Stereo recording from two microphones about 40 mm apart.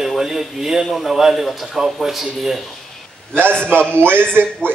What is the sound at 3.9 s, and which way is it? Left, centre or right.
Speech, right.